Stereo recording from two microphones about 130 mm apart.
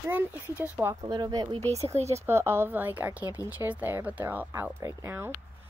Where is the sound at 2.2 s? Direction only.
20° right (ahead or behind).